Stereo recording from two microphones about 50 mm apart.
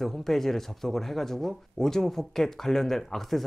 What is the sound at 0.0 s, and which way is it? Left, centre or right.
Speech, centre.